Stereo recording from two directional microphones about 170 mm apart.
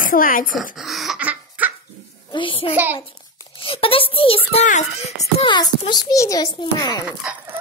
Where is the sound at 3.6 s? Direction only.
30° left (ahead or behind).